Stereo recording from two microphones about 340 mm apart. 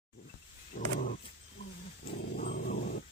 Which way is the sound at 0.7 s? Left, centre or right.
Left.